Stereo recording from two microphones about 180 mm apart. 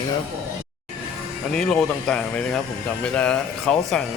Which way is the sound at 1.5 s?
5° left (ahead or behind).